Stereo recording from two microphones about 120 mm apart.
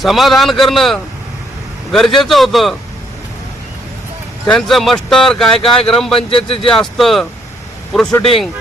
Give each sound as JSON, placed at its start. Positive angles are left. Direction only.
{"t": 0.0, "sound": "a man's voice", "side_deg": 0}
{"t": 4.4, "sound": "speech", "side_deg": 5}
{"t": 6.1, "sound": "speech", "side_deg": 50}
{"t": 6.7, "sound": "speech", "side_deg": 5}